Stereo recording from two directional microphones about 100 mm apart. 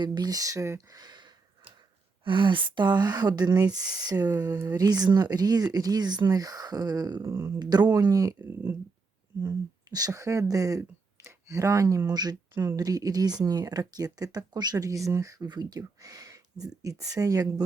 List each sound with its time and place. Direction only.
0.0 s speech: 45° right (ahead or behind)
2.2 s speech: 55° right (ahead or behind); by 7.6 s 25° right (ahead or behind)
7.6 s speech: 40° right (ahead or behind)
9.9 s speech: 35° right (ahead or behind)